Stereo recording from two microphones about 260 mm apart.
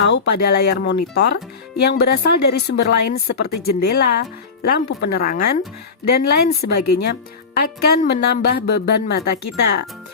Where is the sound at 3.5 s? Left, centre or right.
Left.